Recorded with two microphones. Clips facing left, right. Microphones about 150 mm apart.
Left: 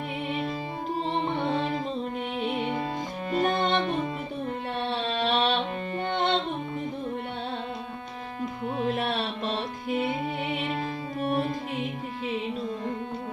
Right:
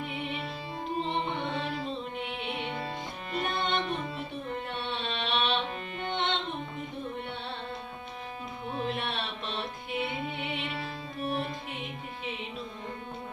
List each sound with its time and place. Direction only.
1.0 s music: 40° left (ahead or behind)
5.0 s a sound: 40° left (ahead or behind)
6.0 s music: 40° left (ahead or behind)
8.9 s music: 40° left (ahead or behind)